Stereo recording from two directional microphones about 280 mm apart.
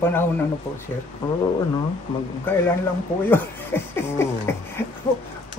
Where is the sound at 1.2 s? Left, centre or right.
Centre.